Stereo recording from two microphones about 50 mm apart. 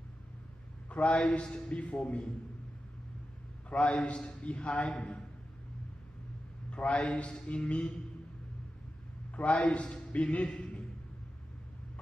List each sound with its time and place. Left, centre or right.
0.8 s a man's voice: left
3.7 s a man's voice: left
6.7 s a man's voice: left
9.6 s a man's voice: left
10.5 s a sound: left